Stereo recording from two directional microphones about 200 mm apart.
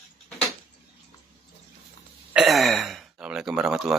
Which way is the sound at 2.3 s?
Centre (ahead or behind).